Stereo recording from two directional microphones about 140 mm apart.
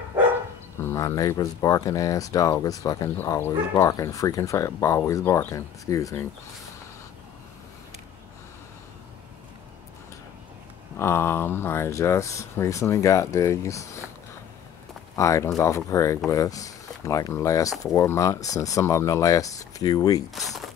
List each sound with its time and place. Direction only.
0.8 s speech: 20° left (ahead or behind)
11.0 s speech: 20° left (ahead or behind)
15.1 s speech: 20° left (ahead or behind)
20.3 s speech: centre (ahead or behind)